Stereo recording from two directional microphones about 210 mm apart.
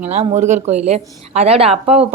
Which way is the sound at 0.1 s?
35° right (ahead or behind).